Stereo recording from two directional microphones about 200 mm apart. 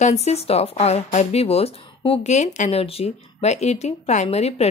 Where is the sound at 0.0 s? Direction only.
35° left (ahead or behind).